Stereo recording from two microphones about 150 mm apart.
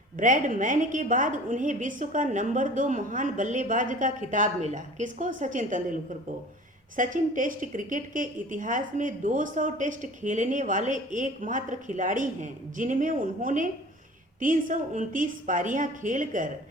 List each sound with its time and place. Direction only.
0.2 s speech: 60° right (ahead or behind)